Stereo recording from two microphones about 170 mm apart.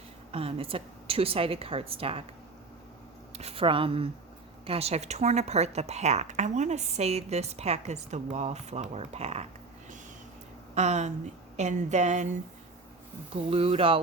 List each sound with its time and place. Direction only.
0.3 s a woman's voice: 35° right (ahead or behind)
3.3 s a woman's voice: 35° right (ahead or behind)
10.8 s a woman's voice: 40° right (ahead or behind)
13.3 s a woman's voice: 35° right (ahead or behind)